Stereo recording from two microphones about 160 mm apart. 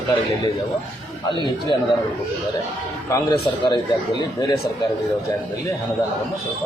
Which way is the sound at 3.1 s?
25° left (ahead or behind).